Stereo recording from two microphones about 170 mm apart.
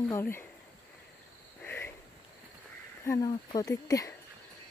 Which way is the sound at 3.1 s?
20° left (ahead or behind).